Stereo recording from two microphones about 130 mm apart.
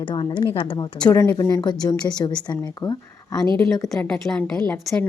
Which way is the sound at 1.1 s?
20° left (ahead or behind).